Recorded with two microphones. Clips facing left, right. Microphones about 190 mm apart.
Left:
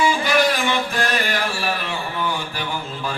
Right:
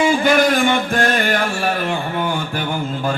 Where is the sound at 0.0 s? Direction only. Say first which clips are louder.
Right 4 dB; 50° right (ahead or behind).